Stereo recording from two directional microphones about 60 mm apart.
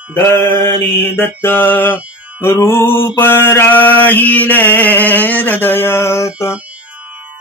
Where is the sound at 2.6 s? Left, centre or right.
Left.